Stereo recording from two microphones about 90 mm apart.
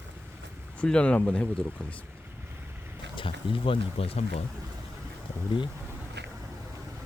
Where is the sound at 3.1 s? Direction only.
75° left (ahead or behind).